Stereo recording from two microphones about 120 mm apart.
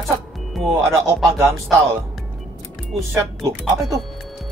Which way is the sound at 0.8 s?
25° right (ahead or behind).